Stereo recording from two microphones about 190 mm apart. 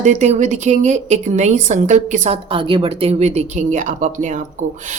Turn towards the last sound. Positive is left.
turn(degrees=-40)  # may be behind; listen again after turning